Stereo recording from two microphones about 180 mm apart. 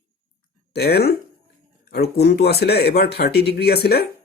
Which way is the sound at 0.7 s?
60° left (ahead or behind).